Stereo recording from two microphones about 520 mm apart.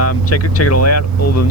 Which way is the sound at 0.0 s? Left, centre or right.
Left.